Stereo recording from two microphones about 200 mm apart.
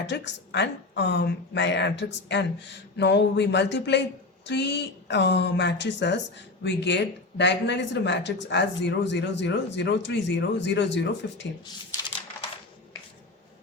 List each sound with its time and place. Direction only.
0.0 s speech: 60° left (ahead or behind)